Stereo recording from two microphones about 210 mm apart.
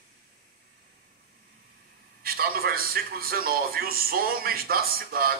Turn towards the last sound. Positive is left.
turn(degrees=-45)  # may be behind; listen again after turning